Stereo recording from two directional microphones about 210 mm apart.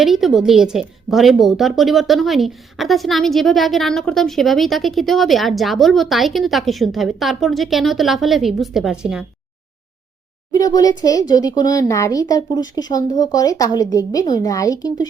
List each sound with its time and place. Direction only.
0.0 s a woman's voice: centre (ahead or behind)
10.5 s speech: 20° left (ahead or behind)